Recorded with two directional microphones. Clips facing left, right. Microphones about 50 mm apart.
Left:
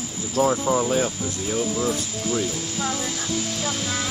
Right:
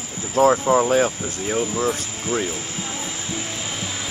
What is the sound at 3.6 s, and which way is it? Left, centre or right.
Music, centre.